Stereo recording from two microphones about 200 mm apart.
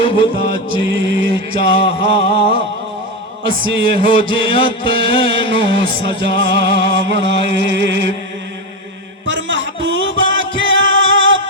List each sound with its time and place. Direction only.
0.0 s music: 25° left (ahead or behind)
0.7 s music: 70° right (ahead or behind)
1.3 s music: 25° left (ahead or behind)
3.7 s music: 25° left (ahead or behind)
6.8 s music: 70° right (ahead or behind)
9.2 s music: 65° right (ahead or behind)